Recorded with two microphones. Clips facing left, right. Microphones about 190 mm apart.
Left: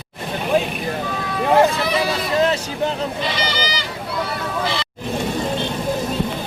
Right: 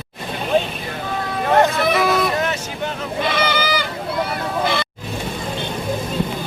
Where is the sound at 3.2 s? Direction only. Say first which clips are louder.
Right 3 dB; 55° right (ahead or behind).